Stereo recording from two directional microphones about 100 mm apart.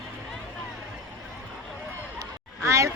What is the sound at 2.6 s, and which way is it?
Speech, 30° right (ahead or behind).